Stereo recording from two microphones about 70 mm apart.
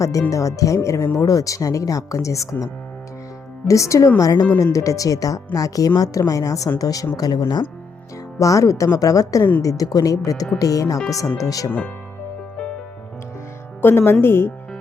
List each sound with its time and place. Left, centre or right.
0.0 s speech: left
1.2 s speech: left
3.7 s speech: left
8.4 s speech: left
13.8 s speech: left